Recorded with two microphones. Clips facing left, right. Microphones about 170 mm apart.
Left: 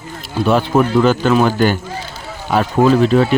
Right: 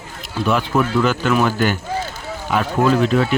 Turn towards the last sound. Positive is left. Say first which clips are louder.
# left 4 dB
turn(degrees=35)  # may be behind; listen again after turning